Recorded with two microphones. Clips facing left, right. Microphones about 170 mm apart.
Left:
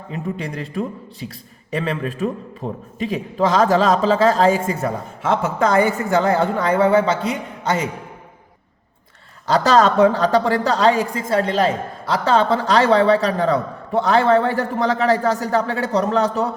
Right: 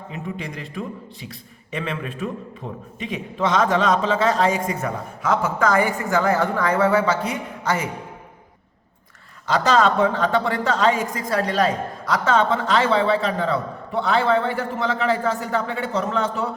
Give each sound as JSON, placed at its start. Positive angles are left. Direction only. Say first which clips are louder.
{"t": 0.3, "sound": "a woman's voice", "louder": "left 5 dB", "side_deg": 40}
{"t": 9.5, "sound": "a woman's voice", "louder": "left 3 dB", "side_deg": 40}